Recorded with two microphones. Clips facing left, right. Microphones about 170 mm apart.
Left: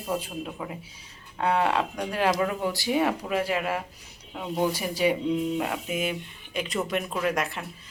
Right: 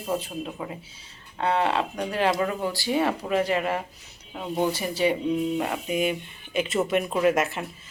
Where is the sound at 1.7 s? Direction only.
5° right (ahead or behind).